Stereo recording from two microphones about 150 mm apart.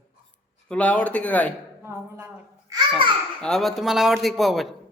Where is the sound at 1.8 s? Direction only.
15° right (ahead or behind).